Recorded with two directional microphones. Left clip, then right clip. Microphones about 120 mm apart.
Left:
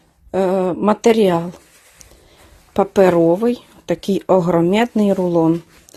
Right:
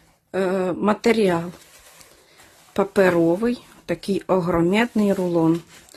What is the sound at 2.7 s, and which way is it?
Speech, 25° left (ahead or behind).